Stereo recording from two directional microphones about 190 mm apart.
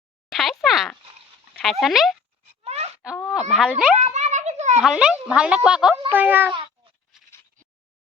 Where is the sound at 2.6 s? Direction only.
35° right (ahead or behind).